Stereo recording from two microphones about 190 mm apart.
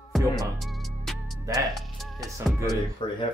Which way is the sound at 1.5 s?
20° right (ahead or behind).